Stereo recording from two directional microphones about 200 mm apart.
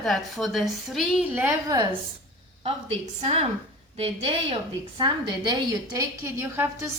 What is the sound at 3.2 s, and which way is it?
A woman's voice, 30° right (ahead or behind).